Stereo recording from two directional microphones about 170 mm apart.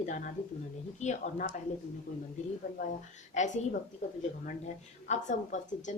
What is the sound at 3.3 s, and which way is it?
Speech, 45° left (ahead or behind).